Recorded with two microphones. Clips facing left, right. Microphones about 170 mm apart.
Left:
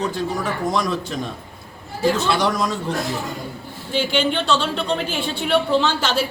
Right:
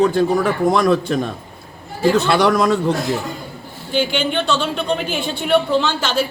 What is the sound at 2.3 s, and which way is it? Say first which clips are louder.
Speech: right 5 dB; 65° right (ahead or behind).